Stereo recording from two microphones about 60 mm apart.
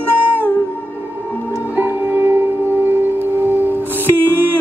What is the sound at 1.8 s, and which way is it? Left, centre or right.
Music, right.